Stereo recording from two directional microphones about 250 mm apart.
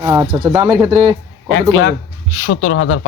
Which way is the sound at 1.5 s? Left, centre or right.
Left.